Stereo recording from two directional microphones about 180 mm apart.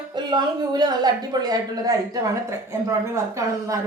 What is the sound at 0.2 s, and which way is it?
Speech, 25° right (ahead or behind).